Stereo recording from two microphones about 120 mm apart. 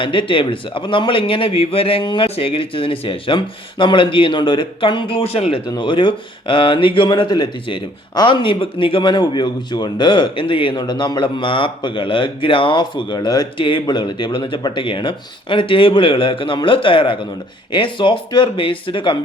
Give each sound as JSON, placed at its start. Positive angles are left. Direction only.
{"t": 0.0, "sound": "speech", "side_deg": 45}
{"t": 5.8, "sound": "speech", "side_deg": 45}